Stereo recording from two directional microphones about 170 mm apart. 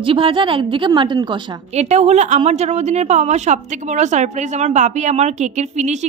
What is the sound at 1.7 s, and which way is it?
Speech, 40° right (ahead or behind).